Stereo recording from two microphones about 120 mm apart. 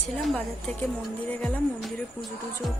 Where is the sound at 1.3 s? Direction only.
10° left (ahead or behind).